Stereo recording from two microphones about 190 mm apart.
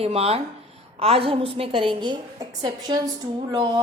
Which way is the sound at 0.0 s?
30° right (ahead or behind).